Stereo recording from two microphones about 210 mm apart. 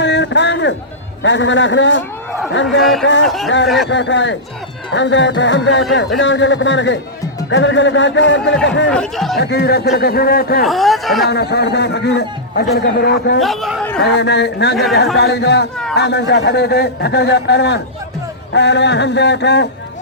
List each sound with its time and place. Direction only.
0.0 s a man's voice: 55° left (ahead or behind)
3.2 s speech: centre (ahead or behind)
3.8 s speech: 60° left (ahead or behind)
8.9 s speech: 5° left (ahead or behind)
9.4 s a man's voice: 50° left (ahead or behind)
10.7 s speech: centre (ahead or behind)
11.3 s a man's voice: 50° left (ahead or behind)
13.4 s speech: centre (ahead or behind)
14.0 s a man's voice: 55° left (ahead or behind)